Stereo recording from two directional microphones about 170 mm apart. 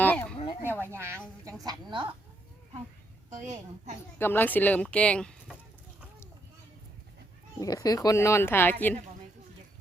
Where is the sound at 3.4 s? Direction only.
45° right (ahead or behind).